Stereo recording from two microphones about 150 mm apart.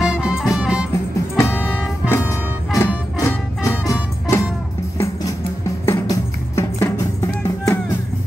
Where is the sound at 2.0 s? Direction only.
15° left (ahead or behind).